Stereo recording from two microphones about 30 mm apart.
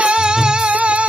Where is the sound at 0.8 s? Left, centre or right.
Right.